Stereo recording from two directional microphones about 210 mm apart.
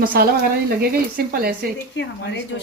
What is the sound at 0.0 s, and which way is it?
Speech, 45° right (ahead or behind).